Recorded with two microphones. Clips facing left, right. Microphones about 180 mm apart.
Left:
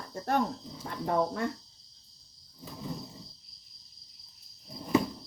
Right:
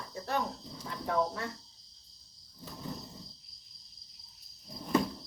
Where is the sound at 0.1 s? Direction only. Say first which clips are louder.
Left 5 dB; 50° left (ahead or behind).